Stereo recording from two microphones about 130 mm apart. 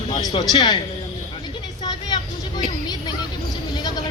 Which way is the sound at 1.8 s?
35° left (ahead or behind).